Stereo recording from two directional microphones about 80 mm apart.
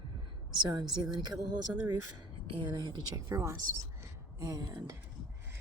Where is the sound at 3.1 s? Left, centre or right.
Right.